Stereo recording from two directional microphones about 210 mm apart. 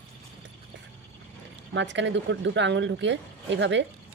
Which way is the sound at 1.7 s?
60° right (ahead or behind).